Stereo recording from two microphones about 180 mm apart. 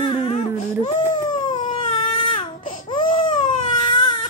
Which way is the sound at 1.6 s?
45° left (ahead or behind).